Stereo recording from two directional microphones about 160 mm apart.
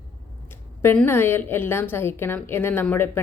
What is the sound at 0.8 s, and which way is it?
Speech, 15° left (ahead or behind).